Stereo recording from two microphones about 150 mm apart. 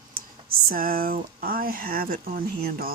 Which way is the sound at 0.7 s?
70° right (ahead or behind).